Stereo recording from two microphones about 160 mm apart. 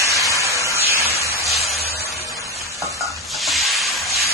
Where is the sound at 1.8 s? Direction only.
75° right (ahead or behind).